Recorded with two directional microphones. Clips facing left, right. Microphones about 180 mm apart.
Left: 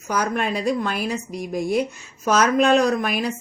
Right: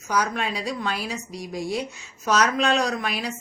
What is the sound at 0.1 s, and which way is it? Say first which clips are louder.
A woman's voice: left 3 dB; 50° left (ahead or behind).